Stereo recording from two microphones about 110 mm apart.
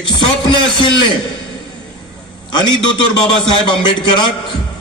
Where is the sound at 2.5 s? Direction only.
45° left (ahead or behind).